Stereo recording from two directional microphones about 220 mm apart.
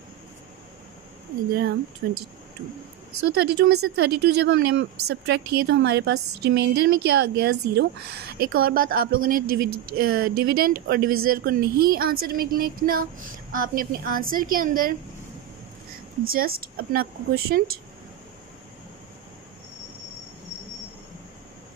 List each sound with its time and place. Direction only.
2.0 s a woman's voice: 55° right (ahead or behind)
3.3 s a woman's voice: 50° right (ahead or behind)
16.3 s a woman's voice: 40° right (ahead or behind)